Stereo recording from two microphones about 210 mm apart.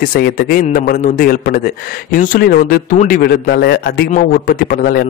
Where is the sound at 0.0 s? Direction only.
45° left (ahead or behind).